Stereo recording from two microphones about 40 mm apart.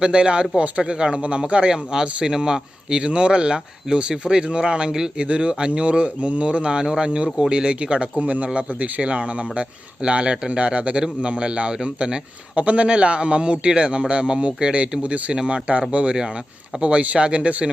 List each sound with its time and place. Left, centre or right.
0.0 s speech: right
8.2 s speech: right